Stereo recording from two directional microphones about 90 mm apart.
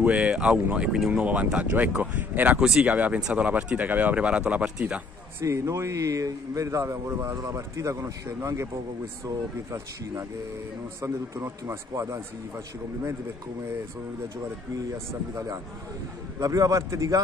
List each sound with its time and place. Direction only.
0.0 s speech: 10° right (ahead or behind)
2.6 s speech: 5° right (ahead or behind)
5.4 s a man's voice: 30° right (ahead or behind)
15.3 s a man's voice: 40° right (ahead or behind)